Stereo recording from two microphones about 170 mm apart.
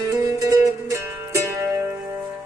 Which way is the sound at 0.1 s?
20° right (ahead or behind).